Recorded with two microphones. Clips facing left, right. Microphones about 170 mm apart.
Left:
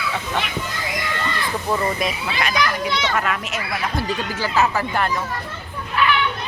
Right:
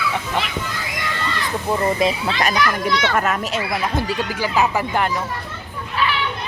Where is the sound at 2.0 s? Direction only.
25° right (ahead or behind).